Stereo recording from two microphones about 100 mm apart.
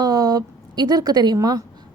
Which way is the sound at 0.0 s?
40° right (ahead or behind).